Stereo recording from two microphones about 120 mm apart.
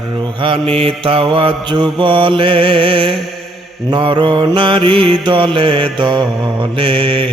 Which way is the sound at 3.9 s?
40° right (ahead or behind).